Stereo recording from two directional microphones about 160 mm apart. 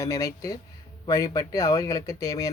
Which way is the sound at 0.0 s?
20° left (ahead or behind).